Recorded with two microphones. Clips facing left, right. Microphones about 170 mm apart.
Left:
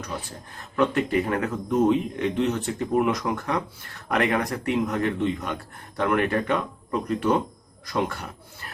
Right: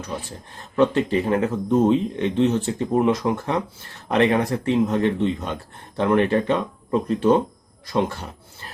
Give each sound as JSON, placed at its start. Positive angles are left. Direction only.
{"t": 0.8, "sound": "speech", "side_deg": -30}